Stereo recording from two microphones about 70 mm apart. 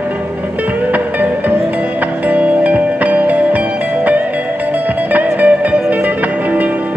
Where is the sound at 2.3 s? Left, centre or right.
Right.